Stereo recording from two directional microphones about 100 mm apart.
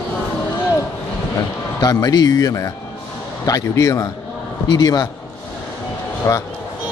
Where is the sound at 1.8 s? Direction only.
40° left (ahead or behind).